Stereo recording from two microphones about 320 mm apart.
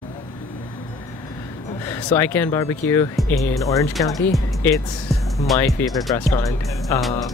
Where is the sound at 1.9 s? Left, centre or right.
Centre.